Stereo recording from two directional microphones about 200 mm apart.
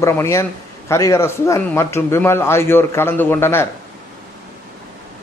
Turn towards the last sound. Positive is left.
turn(degrees=10)  # may be behind; listen again after turning